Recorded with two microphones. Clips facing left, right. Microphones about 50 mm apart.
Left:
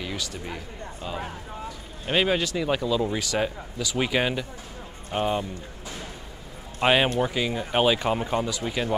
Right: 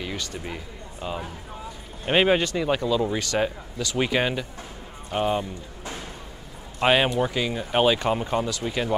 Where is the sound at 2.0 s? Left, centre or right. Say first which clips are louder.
Right 3 dB; right.